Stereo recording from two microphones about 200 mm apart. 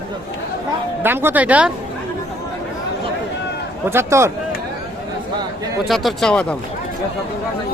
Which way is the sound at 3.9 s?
15° right (ahead or behind).